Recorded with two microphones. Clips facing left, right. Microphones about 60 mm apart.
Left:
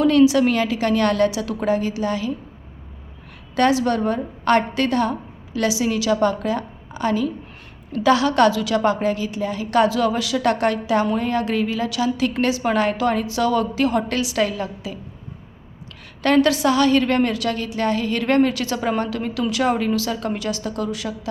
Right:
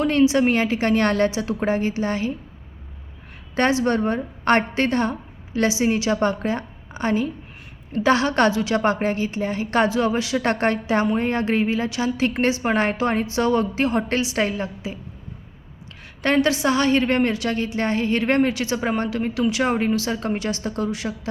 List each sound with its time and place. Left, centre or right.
0.0 s a woman's voice: right
3.5 s a woman's voice: right
16.2 s a woman's voice: right